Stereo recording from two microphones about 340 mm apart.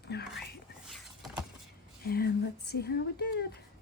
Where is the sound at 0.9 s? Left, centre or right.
Centre.